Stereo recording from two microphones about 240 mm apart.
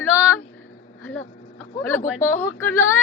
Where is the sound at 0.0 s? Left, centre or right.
Centre.